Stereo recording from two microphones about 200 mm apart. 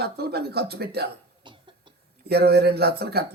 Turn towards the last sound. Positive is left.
turn(degrees=-55)  # may be behind; listen again after turning